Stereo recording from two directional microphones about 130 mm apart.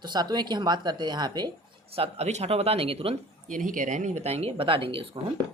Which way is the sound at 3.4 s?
85° right.